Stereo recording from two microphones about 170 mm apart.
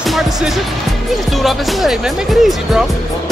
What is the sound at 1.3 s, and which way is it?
Speech, centre (ahead or behind).